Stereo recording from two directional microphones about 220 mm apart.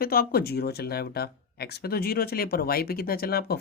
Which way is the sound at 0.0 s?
45° left (ahead or behind).